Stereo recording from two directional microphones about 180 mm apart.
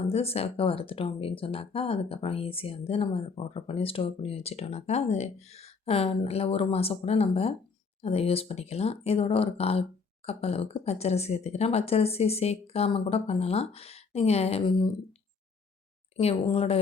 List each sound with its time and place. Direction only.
0.1 s speech: 35° left (ahead or behind)
16.1 s speech: 30° left (ahead or behind)